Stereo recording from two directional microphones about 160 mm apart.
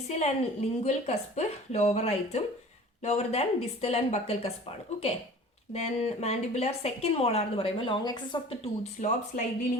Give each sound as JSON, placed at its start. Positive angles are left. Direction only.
{"t": 0.1, "sound": "a woman's voice", "side_deg": 45}
{"t": 5.7, "sound": "a woman's voice", "side_deg": 40}